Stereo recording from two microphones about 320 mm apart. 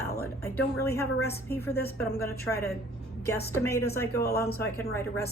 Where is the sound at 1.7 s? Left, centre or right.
Left.